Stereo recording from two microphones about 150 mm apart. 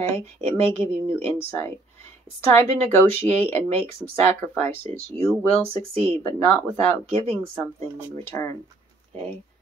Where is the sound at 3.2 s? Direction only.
10° left (ahead or behind).